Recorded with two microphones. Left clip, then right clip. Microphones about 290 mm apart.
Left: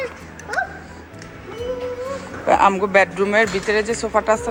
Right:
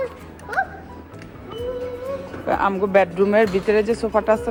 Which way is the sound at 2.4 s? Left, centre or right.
Centre.